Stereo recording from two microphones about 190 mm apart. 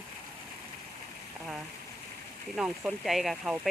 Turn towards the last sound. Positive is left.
turn(degrees=0)  # may be behind; listen again after turning